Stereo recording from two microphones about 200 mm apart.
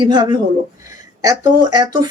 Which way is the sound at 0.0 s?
25° right (ahead or behind).